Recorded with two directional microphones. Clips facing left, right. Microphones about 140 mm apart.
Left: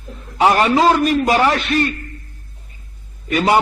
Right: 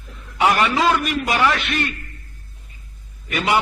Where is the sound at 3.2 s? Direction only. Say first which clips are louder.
Left 5 dB; 40° left (ahead or behind).